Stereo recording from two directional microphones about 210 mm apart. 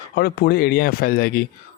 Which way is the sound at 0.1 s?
50° left (ahead or behind).